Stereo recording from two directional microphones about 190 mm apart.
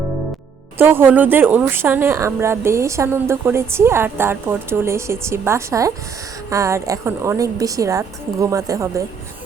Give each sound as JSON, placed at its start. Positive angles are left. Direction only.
{"t": 0.8, "sound": "speech", "side_deg": -10}